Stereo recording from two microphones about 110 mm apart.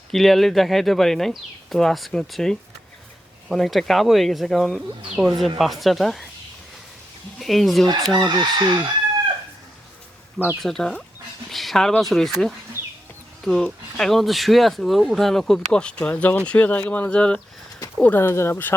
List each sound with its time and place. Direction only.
0.1 s speech: centre (ahead or behind)
7.3 s speech: centre (ahead or behind)
8.3 s chicken: 40° right (ahead or behind)
10.6 s speech: 5° left (ahead or behind); by 18.8 s 20° left (ahead or behind)